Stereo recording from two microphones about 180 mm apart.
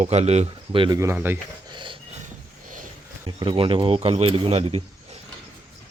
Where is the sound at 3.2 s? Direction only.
25° right (ahead or behind).